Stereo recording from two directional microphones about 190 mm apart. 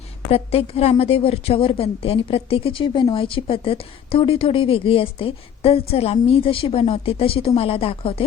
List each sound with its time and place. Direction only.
0.3 s a woman's voice: 30° left (ahead or behind)